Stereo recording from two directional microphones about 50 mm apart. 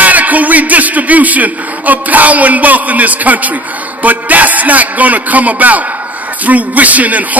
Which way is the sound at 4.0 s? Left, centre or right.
Right.